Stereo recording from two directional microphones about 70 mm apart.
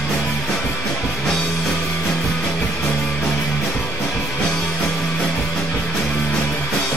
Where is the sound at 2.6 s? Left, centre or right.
Centre.